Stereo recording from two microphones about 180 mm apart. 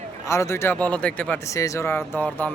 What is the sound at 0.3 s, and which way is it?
Speech, 15° left (ahead or behind).